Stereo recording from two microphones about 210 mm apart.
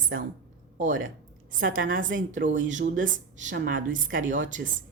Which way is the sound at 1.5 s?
40° right (ahead or behind).